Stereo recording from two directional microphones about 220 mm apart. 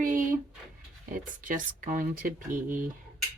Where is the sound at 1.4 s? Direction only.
35° right (ahead or behind).